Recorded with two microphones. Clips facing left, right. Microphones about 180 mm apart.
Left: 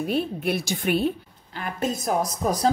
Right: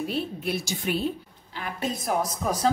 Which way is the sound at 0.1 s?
55° left (ahead or behind).